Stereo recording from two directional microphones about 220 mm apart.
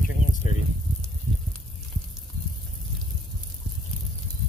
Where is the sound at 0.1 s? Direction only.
35° left (ahead or behind).